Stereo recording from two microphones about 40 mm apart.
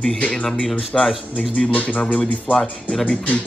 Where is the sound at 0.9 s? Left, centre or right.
Left.